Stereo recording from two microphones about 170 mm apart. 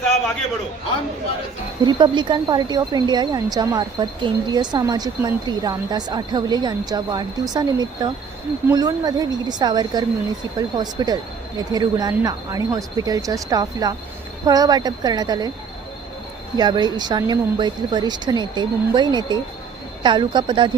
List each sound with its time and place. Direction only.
1.8 s speech: 25° right (ahead or behind)
16.6 s speech: 25° right (ahead or behind)